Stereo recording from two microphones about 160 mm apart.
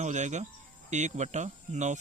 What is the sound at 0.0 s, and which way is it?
Speech, 45° right (ahead or behind).